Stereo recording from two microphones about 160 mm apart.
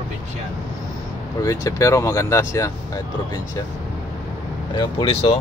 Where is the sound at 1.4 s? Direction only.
20° left (ahead or behind).